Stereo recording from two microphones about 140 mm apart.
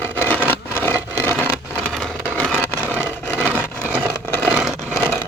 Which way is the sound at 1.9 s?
5° left (ahead or behind).